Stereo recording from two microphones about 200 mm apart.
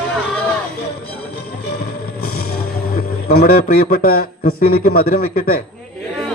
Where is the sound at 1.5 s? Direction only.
50° left (ahead or behind).